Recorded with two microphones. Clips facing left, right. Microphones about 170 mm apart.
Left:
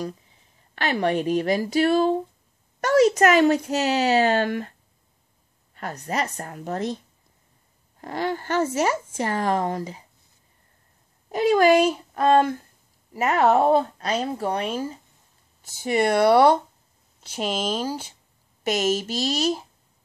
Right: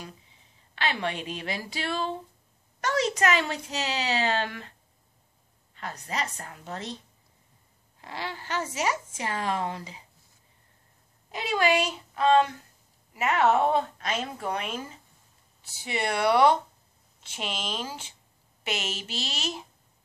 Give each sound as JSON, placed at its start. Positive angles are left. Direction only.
{"t": 0.7, "sound": "speech", "side_deg": 45}
{"t": 5.8, "sound": "speech", "side_deg": 45}
{"t": 8.0, "sound": "speech", "side_deg": 45}
{"t": 11.3, "sound": "a woman's voice", "side_deg": 45}
{"t": 15.6, "sound": "a woman's voice", "side_deg": 45}